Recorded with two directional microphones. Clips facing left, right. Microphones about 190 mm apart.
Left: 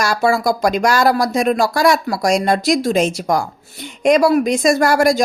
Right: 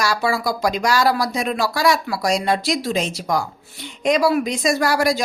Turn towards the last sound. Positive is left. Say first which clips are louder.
# left 5 dB
turn(degrees=50)  # may be behind; listen again after turning